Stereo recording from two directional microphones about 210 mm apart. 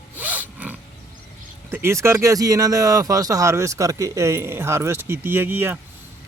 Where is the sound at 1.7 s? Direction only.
10° right (ahead or behind).